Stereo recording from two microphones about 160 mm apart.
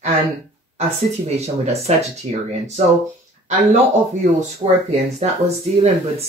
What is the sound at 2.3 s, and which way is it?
Speech, 55° right (ahead or behind).